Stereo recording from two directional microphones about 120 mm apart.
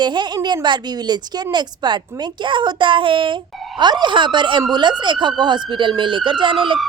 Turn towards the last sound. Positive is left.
turn(degrees=-45)  # may be behind; listen again after turning